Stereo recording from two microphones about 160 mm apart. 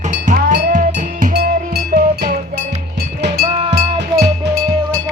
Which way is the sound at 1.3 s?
90° right.